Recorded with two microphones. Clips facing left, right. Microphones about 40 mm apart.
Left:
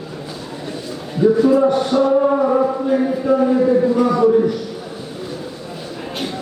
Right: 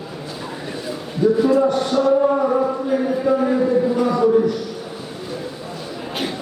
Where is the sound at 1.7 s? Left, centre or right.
Centre.